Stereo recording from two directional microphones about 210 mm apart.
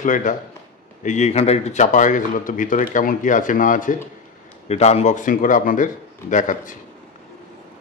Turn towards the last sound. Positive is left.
turn(degrees=35)  # may be behind; listen again after turning